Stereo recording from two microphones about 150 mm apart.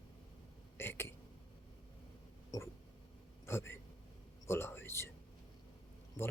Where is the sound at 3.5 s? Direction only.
15° left (ahead or behind).